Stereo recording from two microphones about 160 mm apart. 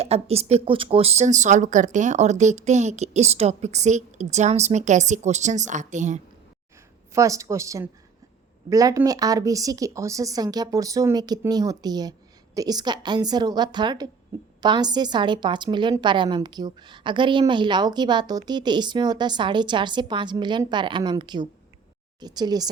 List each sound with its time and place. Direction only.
0.0 s speech: 40° right (ahead or behind)
7.1 s a woman's voice: 20° right (ahead or behind)